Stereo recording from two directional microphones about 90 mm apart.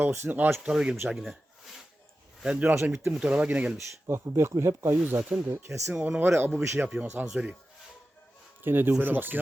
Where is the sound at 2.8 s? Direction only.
30° right (ahead or behind).